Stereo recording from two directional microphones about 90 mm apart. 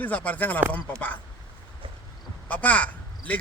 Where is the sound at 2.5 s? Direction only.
20° left (ahead or behind).